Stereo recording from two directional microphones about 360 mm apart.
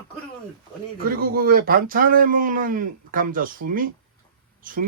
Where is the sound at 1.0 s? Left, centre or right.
Right.